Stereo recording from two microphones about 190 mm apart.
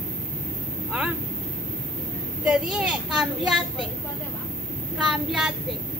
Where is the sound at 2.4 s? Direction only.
5° right (ahead or behind).